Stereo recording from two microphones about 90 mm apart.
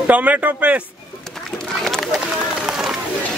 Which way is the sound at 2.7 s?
5° right (ahead or behind).